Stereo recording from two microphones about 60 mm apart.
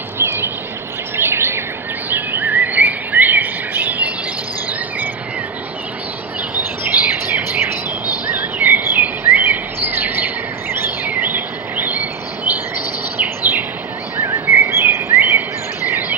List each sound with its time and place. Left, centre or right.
0.2 s a sound: right
1.1 s bird vocalization: right
2.0 s bird vocalization: right
7.0 s bird: right
8.3 s a sound: right
13.2 s bird: right
14.4 s bird vocalization: right